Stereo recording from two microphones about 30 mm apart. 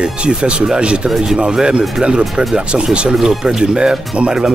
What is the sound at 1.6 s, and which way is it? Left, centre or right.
Speech, right.